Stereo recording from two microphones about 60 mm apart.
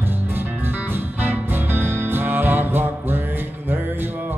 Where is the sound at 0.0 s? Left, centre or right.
Right.